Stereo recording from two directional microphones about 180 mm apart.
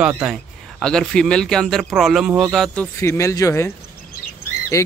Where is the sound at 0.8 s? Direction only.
5° left (ahead or behind).